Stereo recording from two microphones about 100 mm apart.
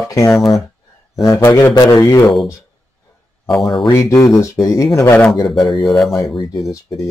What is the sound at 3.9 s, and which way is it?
Speech, 30° left (ahead or behind).